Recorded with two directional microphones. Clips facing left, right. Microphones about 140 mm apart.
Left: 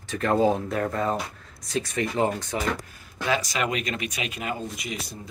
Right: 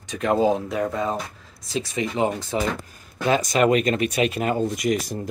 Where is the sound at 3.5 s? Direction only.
45° right (ahead or behind).